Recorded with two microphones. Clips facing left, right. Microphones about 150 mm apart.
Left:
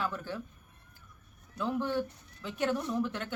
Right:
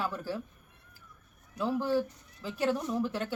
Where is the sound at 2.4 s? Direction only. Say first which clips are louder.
Right 2 dB; 30° right (ahead or behind).